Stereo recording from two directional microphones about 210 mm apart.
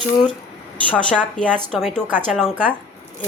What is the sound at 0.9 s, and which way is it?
A woman's voice, 5° left (ahead or behind).